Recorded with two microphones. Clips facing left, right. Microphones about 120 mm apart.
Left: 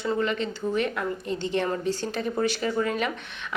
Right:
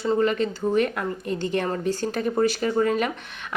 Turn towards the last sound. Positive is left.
turn(degrees=-45)  # may be behind; listen again after turning